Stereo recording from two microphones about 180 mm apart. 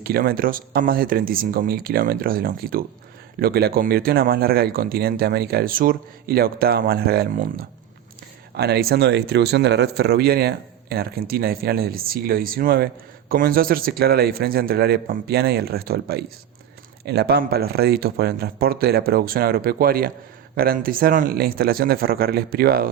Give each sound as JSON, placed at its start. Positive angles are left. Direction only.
{"t": 0.0, "sound": "speech", "side_deg": -55}
{"t": 8.5, "sound": "speech", "side_deg": -65}